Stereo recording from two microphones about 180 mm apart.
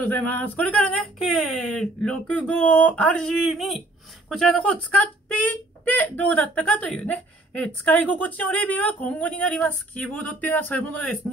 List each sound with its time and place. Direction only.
0.1 s speech: 10° left (ahead or behind)